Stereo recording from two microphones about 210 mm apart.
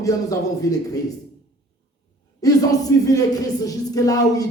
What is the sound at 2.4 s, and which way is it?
Speech, 15° left (ahead or behind).